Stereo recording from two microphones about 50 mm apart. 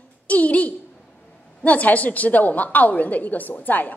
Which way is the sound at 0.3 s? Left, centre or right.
Left.